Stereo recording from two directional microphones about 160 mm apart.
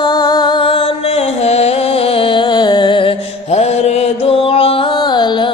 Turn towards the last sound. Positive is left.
turn(degrees=30)  # may be behind; listen again after turning